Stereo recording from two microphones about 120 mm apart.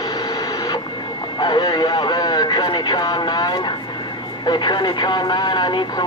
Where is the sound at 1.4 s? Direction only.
35° left (ahead or behind).